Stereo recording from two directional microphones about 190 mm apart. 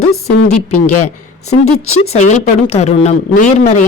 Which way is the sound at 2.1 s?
35° left (ahead or behind).